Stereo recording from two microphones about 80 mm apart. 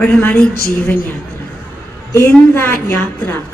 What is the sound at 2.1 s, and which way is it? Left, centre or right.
Speech, left.